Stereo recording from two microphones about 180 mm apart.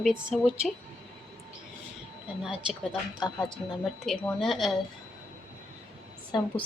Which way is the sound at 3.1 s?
25° left (ahead or behind).